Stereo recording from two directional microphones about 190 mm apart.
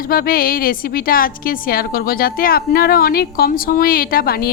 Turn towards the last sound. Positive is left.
turn(degrees=50)  # may be behind; listen again after turning